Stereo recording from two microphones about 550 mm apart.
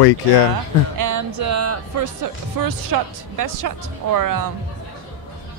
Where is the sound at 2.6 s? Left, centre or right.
Right.